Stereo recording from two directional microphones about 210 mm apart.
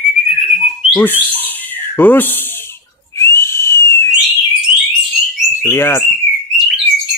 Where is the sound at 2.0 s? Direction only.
10° left (ahead or behind).